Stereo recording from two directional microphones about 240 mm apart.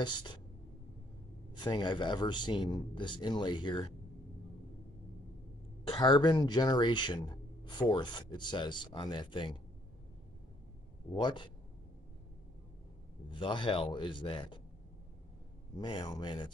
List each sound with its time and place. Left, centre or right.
0.0 s speech: centre
1.5 s speech: centre
5.9 s speech: centre
11.1 s speech: centre
13.3 s speech: left
15.7 s speech: centre